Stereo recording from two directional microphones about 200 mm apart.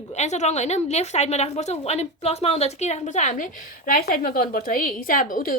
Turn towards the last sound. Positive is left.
turn(degrees=40)  # may be behind; listen again after turning